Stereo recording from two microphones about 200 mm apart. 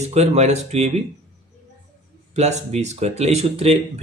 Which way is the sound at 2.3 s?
35° right (ahead or behind).